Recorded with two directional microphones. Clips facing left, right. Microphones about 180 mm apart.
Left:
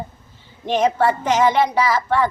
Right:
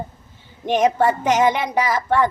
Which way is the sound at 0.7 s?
15° right (ahead or behind).